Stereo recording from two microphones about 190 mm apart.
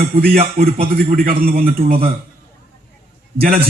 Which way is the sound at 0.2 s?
50° right (ahead or behind).